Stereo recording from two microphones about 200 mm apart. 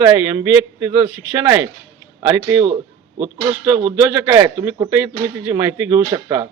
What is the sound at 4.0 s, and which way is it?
Speech, 10° right (ahead or behind).